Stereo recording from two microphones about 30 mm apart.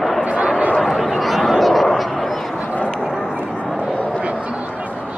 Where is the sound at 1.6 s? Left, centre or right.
Centre.